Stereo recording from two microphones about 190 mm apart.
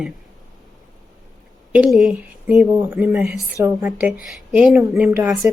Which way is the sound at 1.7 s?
5° right (ahead or behind).